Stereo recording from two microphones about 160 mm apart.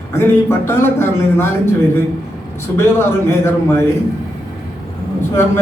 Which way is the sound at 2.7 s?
15° left (ahead or behind).